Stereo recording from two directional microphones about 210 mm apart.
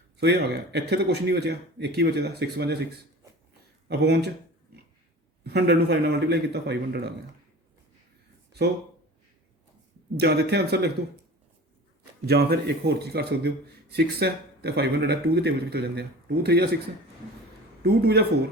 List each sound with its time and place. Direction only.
0.2 s a man's voice: 50° right (ahead or behind)
4.7 s pig: 50° right (ahead or behind)
5.4 s a man's voice: 55° right (ahead or behind)
10.2 s a man's voice: 50° right (ahead or behind)
12.2 s a man's voice: 50° right (ahead or behind)
17.8 s a man's voice: 50° right (ahead or behind)